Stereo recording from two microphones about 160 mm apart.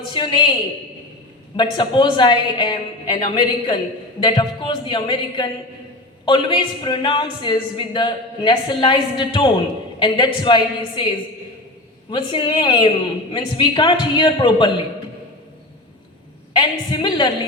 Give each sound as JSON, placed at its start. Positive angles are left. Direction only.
{"t": 0.1, "sound": "a woman's voice", "side_deg": 30}
{"t": 1.5, "sound": "a woman's voice", "side_deg": 30}
{"t": 12.1, "sound": "a woman's voice", "side_deg": 30}
{"t": 16.5, "sound": "a woman's voice", "side_deg": 30}